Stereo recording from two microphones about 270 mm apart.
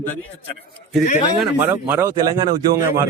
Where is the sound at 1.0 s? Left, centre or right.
Left.